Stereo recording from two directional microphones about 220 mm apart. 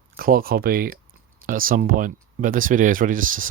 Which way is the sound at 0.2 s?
40° right (ahead or behind).